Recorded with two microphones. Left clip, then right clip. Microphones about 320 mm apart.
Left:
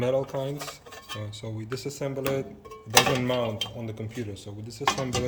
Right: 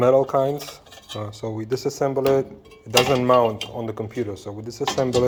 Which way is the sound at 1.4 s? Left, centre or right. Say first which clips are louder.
Right 10 dB; right.